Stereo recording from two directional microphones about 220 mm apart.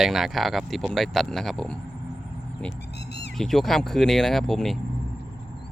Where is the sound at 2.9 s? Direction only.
50° left (ahead or behind).